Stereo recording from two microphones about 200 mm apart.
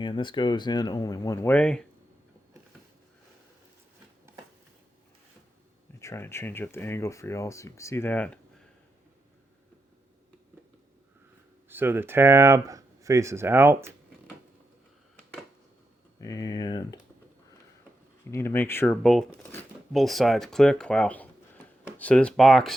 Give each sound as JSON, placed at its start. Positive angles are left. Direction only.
{"t": 0.0, "sound": "speech", "side_deg": 25}
{"t": 6.0, "sound": "speech", "side_deg": 15}
{"t": 11.7, "sound": "speech", "side_deg": -10}
{"t": 16.2, "sound": "speech", "side_deg": 15}
{"t": 18.3, "sound": "speech", "side_deg": 10}
{"t": 19.9, "sound": "speech", "side_deg": 0}